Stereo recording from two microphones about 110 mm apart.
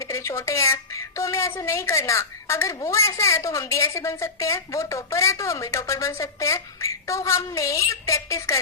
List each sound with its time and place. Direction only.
0.0 s a woman's voice: 30° left (ahead or behind)